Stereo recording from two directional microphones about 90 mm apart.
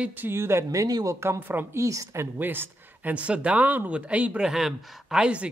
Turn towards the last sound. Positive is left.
turn(degrees=-10)  # may be behind; listen again after turning